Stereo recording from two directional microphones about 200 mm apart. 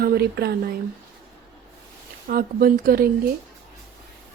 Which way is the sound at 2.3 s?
50° right (ahead or behind).